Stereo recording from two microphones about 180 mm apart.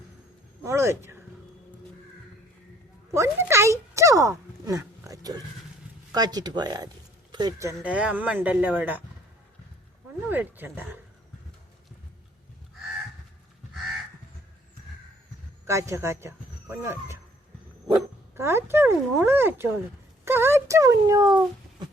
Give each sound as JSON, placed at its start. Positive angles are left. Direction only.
{"t": 0.6, "sound": "speech", "side_deg": -15}
{"t": 3.2, "sound": "speech", "side_deg": -15}
{"t": 10.2, "sound": "speech", "side_deg": -10}
{"t": 15.6, "sound": "speech", "side_deg": -15}